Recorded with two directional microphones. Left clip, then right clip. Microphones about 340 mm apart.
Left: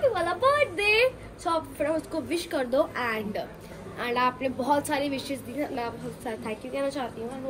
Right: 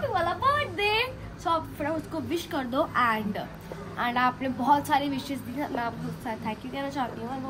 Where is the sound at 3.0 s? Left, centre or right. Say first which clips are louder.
Right 4 dB; centre.